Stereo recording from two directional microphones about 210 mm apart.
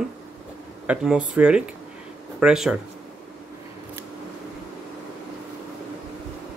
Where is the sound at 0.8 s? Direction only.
5° right (ahead or behind).